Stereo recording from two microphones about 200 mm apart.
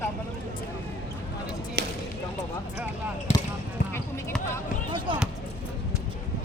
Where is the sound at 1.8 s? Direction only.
55° right (ahead or behind).